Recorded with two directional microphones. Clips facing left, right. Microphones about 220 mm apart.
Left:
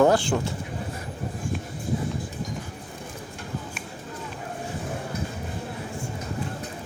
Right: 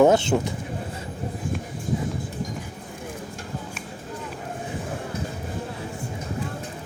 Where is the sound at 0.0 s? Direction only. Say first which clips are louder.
Right 3 dB; 20° right (ahead or behind).